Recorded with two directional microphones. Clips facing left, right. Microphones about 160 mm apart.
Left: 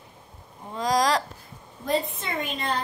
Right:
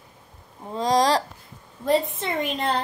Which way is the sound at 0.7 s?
30° right (ahead or behind).